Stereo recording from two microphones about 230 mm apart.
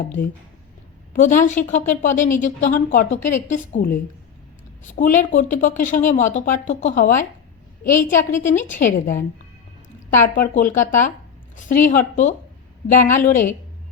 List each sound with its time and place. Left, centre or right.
1.1 s speech: left
7.9 s a woman's voice: centre
8.3 s speech: left
10.3 s speech: left